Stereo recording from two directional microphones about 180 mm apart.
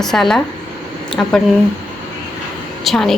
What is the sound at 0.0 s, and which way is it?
Speech, centre (ahead or behind).